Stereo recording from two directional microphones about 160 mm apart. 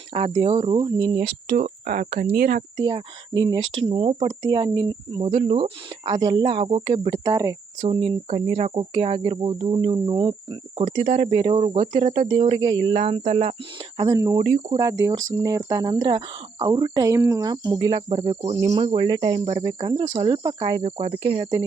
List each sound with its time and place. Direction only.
0.1 s speech: 40° right (ahead or behind)
1.3 s speech: 75° right (ahead or behind)
1.6 s speech: 60° right (ahead or behind)
2.7 s speech: 30° right (ahead or behind)
6.1 s speech: 25° right (ahead or behind)
7.8 s speech: 40° right (ahead or behind)
10.9 s speech: 45° right (ahead or behind)
14.0 s speech: 25° right (ahead or behind)
14.4 s speech: 50° right (ahead or behind)
14.8 s speech: 25° right (ahead or behind)
20.8 s speech: 40° right (ahead or behind)